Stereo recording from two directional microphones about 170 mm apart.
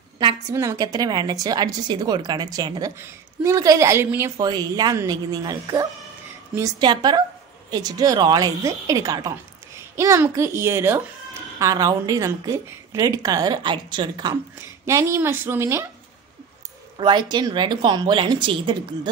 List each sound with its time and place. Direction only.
0.2 s a woman's voice: 25° right (ahead or behind)
16.9 s a woman's voice: 25° right (ahead or behind)